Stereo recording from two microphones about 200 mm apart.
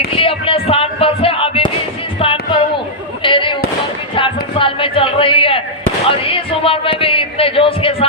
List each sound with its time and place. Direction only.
0.0 s music: 25° left (ahead or behind)
3.2 s fireworks: 25° left (ahead or behind)
4.1 s a sound: 25° left (ahead or behind)
6.1 s speech: 25° left (ahead or behind)